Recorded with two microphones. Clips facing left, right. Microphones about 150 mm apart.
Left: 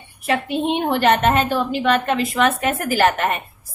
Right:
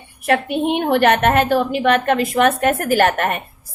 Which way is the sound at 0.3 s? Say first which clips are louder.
Right 3 dB; 55° right (ahead or behind).